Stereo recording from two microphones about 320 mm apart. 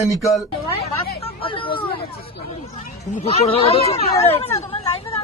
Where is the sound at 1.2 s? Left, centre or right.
Centre.